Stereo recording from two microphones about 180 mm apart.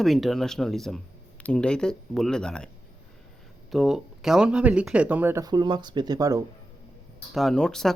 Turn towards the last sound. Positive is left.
turn(degrees=5)  # may be behind; listen again after turning